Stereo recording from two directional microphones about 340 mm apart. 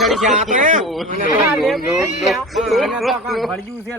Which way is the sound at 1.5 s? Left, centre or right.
Centre.